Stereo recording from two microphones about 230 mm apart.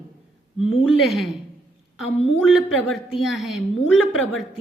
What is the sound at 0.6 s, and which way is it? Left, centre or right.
Speech, left.